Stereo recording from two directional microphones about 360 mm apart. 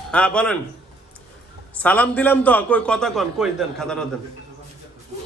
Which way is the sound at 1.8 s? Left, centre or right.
Centre.